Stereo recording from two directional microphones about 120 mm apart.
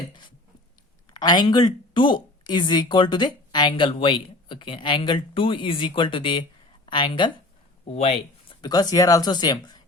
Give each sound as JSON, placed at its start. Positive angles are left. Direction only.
{"t": 0.1, "sound": "a sound", "side_deg": 40}
{"t": 1.1, "sound": "speech", "side_deg": 35}
{"t": 7.9, "sound": "speech", "side_deg": 55}
{"t": 8.6, "sound": "speech", "side_deg": 35}